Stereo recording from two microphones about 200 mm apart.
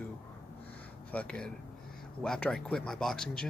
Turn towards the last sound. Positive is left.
turn(degrees=0)  # may be behind; listen again after turning